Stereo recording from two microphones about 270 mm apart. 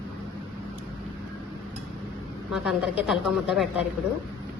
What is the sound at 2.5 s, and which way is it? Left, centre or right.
A woman's voice, centre.